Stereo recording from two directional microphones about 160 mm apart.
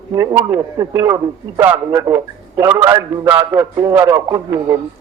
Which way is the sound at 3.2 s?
10° right (ahead or behind).